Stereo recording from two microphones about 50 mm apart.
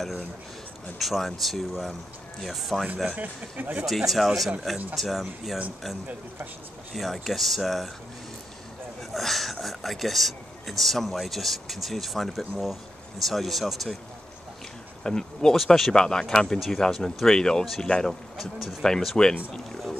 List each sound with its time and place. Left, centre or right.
0.9 s speech: centre
3.2 s speech: right
3.8 s speech: centre
6.9 s speech: centre
9.1 s speech: centre
15.0 s speech: centre
15.5 s speech: centre
15.9 s speech: centre
18.4 s speech: centre
18.9 s speech: centre